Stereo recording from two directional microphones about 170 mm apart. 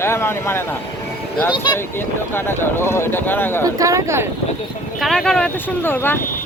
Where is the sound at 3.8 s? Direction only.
20° right (ahead or behind).